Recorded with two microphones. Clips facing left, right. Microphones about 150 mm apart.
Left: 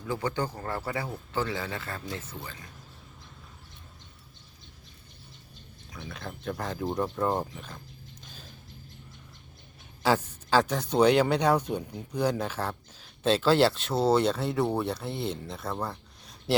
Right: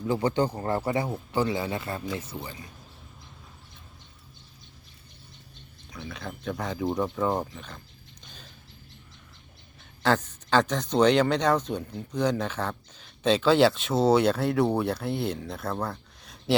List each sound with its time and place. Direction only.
0.0 s speech: 20° right (ahead or behind)
6.1 s speech: centre (ahead or behind)
8.2 s mechanisms: 5° left (ahead or behind)
10.0 s speech: 5° left (ahead or behind)